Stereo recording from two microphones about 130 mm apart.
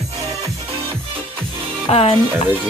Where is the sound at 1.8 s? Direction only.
50° left (ahead or behind).